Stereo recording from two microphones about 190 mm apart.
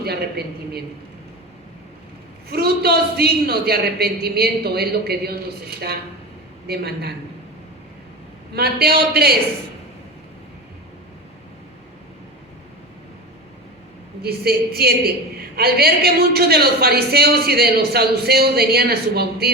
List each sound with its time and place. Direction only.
0.0 s speech: 55° right (ahead or behind)
2.5 s speech: 55° right (ahead or behind)
6.7 s speech: 55° right (ahead or behind)
8.5 s speech: 55° right (ahead or behind)
14.2 s speech: 55° right (ahead or behind)